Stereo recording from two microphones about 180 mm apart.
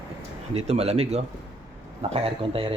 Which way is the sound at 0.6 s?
35° right (ahead or behind).